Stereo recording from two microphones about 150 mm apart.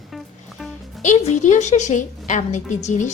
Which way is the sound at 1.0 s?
55° left (ahead or behind).